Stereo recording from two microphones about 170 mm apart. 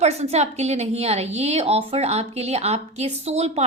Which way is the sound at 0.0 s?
40° right (ahead or behind).